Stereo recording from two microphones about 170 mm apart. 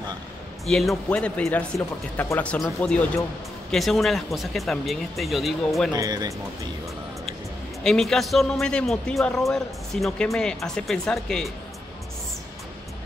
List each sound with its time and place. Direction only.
0.7 s a man's voice: centre (ahead or behind)
5.9 s speech: 20° right (ahead or behind)
7.8 s a man's voice: 5° left (ahead or behind)